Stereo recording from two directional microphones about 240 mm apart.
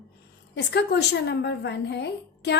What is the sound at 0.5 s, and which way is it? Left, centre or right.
A woman's voice, left.